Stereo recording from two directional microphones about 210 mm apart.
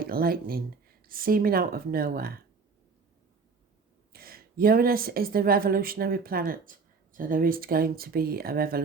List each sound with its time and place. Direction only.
0.0 s a woman's voice: 45° right (ahead or behind)
4.1 s a woman's voice: 45° right (ahead or behind)